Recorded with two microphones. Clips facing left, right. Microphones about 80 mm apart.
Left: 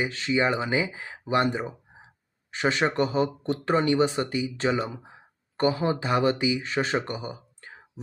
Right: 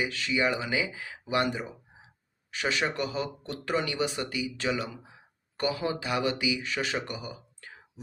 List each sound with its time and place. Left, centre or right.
0.0 s speech: left